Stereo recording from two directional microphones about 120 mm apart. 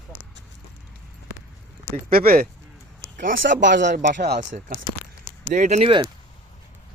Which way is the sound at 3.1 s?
90° right.